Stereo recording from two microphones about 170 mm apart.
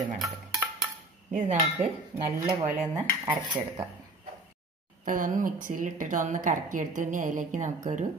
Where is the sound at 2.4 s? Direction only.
10° right (ahead or behind).